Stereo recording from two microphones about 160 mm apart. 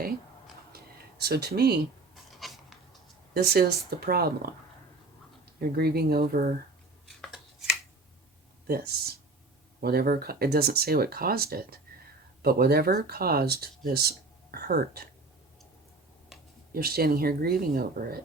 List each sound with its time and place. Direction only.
1.2 s speech: 80° right
2.1 s a sound: centre (ahead or behind)
3.3 s speech: 75° right (ahead or behind)
5.5 s speech: 75° right (ahead or behind)
7.2 s shuffling cards: centre (ahead or behind)
8.6 s speech: 70° right (ahead or behind)
16.7 s speech: 70° right (ahead or behind)